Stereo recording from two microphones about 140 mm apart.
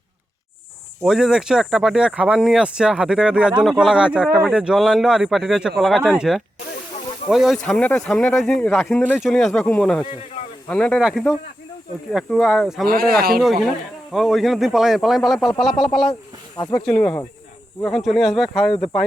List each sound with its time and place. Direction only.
1.0 s speech: 5° right (ahead or behind)
7.6 s speech: 10° left (ahead or behind)
12.1 s speech: centre (ahead or behind)
12.9 s speech: 90° right
13.4 s speech: centre (ahead or behind)